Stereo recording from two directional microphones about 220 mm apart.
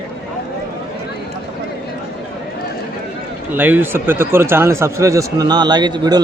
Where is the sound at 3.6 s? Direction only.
10° right (ahead or behind).